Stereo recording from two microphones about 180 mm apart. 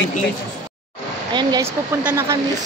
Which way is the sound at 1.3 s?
20° right (ahead or behind).